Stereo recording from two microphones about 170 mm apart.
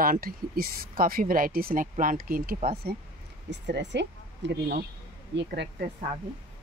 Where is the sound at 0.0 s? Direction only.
60° right (ahead or behind).